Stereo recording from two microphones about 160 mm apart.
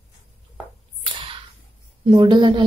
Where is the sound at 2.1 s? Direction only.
30° right (ahead or behind).